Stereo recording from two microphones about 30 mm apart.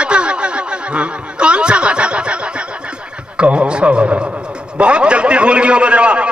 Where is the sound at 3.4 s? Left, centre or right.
Right.